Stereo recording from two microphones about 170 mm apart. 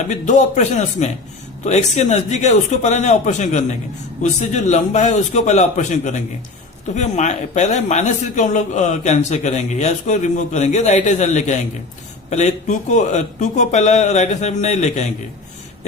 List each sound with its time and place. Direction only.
0.1 s a man's voice: 45° left (ahead or behind)